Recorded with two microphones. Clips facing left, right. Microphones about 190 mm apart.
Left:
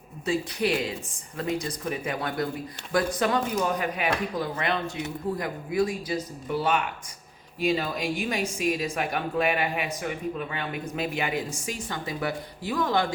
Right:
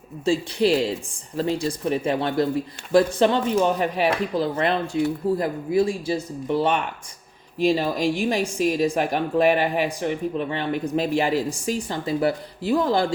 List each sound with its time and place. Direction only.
0.3 s speech: 30° right (ahead or behind)